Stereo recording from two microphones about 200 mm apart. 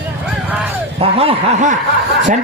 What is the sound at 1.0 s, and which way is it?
Speech, 30° right (ahead or behind).